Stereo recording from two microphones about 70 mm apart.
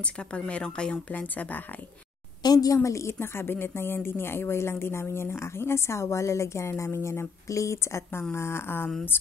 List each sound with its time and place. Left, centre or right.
0.0 s speech: centre
2.4 s speech: left